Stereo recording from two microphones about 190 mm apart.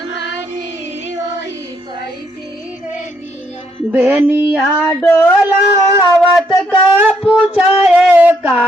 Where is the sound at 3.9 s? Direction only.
10° right (ahead or behind).